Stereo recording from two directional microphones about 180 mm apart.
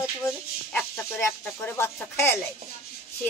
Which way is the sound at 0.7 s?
15° left (ahead or behind).